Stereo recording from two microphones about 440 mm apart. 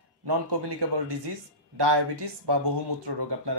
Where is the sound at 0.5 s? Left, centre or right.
Right.